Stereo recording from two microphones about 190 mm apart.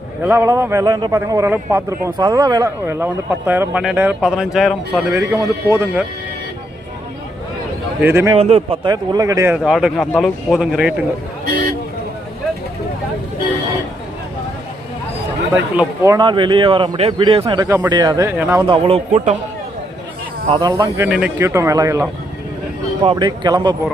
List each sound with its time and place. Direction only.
0.3 s speech: 10° right (ahead or behind)
5.1 s speech: 15° right (ahead or behind)
8.0 s speech: 15° right (ahead or behind)
8.4 s a man's voice: 30° right (ahead or behind)
9.6 s speech: centre (ahead or behind)
15.5 s speech: 10° right (ahead or behind)
16.1 s a man's voice: 25° right (ahead or behind)
18.7 s speech: 30° right (ahead or behind)
20.5 s a man's voice: 20° right (ahead or behind)
23.0 s a man's voice: 25° right (ahead or behind)